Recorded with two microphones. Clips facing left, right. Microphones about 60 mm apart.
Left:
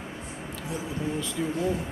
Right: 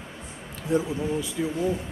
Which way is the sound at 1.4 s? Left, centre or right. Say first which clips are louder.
Even; centre.